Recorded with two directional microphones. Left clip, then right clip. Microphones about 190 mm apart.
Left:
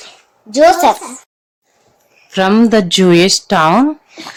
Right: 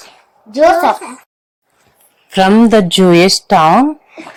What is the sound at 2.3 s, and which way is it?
Speech, 20° right (ahead or behind).